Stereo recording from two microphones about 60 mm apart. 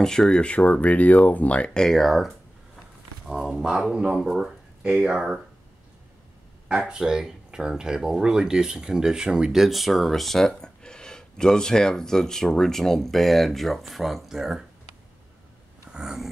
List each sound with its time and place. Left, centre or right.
0.0 s speech: centre
1.8 s speech: centre
4.8 s speech: centre
6.7 s speech: centre
15.9 s a sound: centre